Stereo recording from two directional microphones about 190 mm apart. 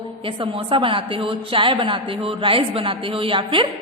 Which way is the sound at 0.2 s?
30° right (ahead or behind).